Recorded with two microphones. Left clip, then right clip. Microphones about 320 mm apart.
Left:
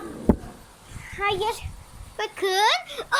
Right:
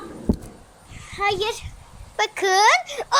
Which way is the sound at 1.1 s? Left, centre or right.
Centre.